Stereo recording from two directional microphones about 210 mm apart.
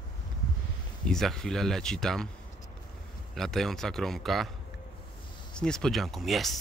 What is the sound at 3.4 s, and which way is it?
Speech, centre (ahead or behind).